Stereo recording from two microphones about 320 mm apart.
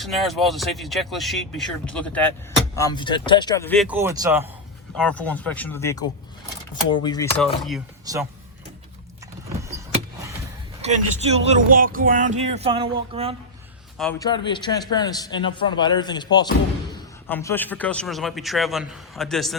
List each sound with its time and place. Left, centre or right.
0.0 s a man's voice: centre
4.9 s a man's voice: centre
8.0 s speech: centre
10.8 s speech: centre
14.0 s a man's voice: centre